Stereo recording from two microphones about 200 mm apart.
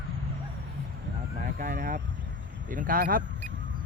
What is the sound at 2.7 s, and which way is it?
Speech, 45° right (ahead or behind).